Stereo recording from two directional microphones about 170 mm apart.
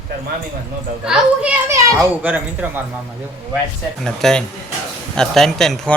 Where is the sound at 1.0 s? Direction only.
5° right (ahead or behind).